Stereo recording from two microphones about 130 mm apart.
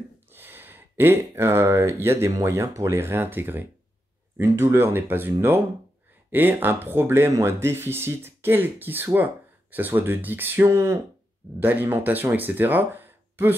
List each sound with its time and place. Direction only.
0.3 s speech: 15° right (ahead or behind)